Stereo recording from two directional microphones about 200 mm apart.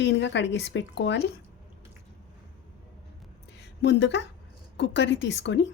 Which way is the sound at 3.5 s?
60° left (ahead or behind).